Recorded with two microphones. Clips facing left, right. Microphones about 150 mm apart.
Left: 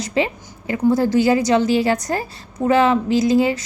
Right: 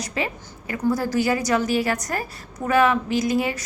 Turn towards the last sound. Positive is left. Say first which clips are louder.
# left 6 dB
turn(degrees=30)  # may be behind; listen again after turning